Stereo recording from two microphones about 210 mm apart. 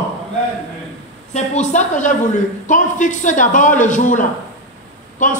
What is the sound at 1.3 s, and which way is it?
A man's voice, 35° left (ahead or behind).